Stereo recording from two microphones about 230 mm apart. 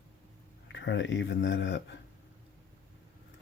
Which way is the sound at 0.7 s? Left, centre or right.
Left.